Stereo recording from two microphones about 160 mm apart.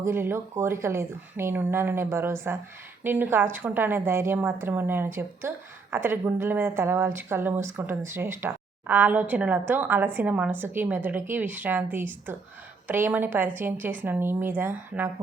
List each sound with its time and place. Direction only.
0.0 s a woman's voice: 15° right (ahead or behind)